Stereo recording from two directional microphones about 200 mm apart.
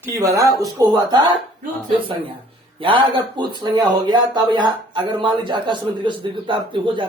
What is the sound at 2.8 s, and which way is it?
Speech, 25° right (ahead or behind).